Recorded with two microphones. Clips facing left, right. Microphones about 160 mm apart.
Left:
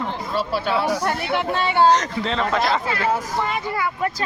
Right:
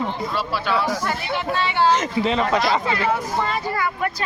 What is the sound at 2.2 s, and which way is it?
Speech, 10° right (ahead or behind).